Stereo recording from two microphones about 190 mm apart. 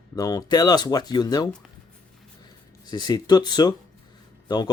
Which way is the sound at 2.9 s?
20° left (ahead or behind).